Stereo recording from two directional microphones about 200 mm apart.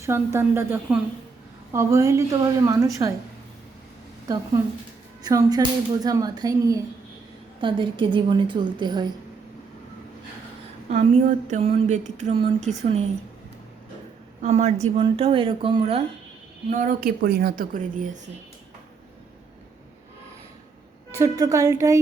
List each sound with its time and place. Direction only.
0.0 s speech: 15° right (ahead or behind)
5.2 s speech: 20° right (ahead or behind)
10.8 s a sound: 35° right (ahead or behind)
14.4 s speech: 35° right (ahead or behind)
16.6 s a woman's voice: 40° right (ahead or behind)
21.1 s speech: 15° right (ahead or behind)